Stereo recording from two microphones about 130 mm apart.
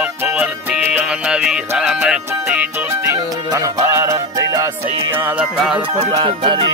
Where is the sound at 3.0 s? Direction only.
25° right (ahead or behind).